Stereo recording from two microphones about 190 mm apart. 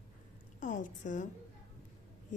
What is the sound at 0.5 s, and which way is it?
Speech, 40° left (ahead or behind).